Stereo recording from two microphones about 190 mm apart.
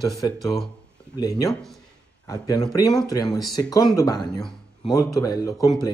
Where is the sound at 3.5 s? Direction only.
20° left (ahead or behind).